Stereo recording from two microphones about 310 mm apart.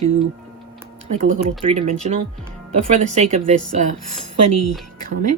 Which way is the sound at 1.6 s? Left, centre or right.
Centre.